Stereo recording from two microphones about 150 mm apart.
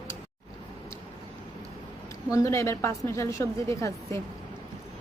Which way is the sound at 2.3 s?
20° left (ahead or behind).